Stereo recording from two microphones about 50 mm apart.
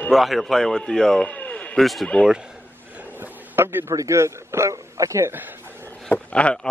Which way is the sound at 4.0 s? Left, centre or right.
Right.